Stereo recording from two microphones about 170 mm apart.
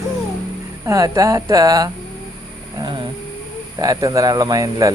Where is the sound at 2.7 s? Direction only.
25° right (ahead or behind).